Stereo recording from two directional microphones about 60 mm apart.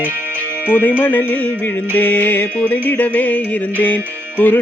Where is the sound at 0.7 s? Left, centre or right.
Left.